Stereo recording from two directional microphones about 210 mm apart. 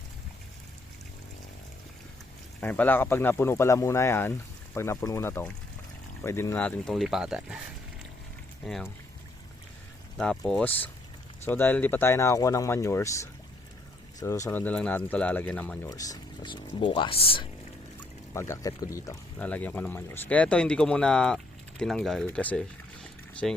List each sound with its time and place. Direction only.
2.6 s speech: 5° left (ahead or behind)
8.6 s speech: centre (ahead or behind)
10.2 s speech: centre (ahead or behind)
15.9 s speech: 15° left (ahead or behind)
18.3 s speech: 15° left (ahead or behind)